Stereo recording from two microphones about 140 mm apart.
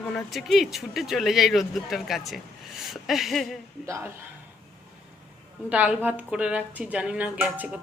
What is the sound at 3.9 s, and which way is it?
Speech, 20° right (ahead or behind).